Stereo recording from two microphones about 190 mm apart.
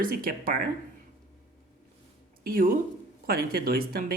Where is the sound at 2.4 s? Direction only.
50° right (ahead or behind).